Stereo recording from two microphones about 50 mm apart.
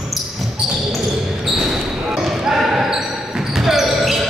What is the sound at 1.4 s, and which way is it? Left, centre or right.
Basketball bounce, centre.